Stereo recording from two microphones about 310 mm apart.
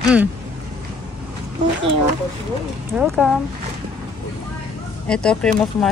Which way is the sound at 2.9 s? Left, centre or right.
Centre.